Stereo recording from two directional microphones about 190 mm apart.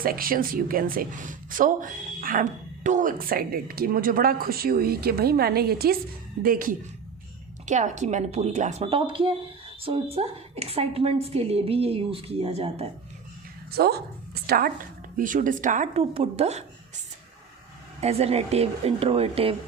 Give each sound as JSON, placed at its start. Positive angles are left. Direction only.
{"t": 0.0, "sound": "a woman's voice", "side_deg": -50}
{"t": 13.7, "sound": "a woman's voice", "side_deg": -55}
{"t": 18.0, "sound": "a woman's voice", "side_deg": -35}